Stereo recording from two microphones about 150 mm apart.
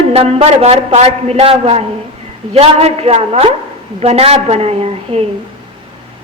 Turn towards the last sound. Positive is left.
turn(degrees=-40)  # may be behind; listen again after turning